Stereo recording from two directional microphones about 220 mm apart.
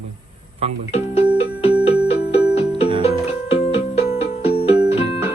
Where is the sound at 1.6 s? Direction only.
25° left (ahead or behind).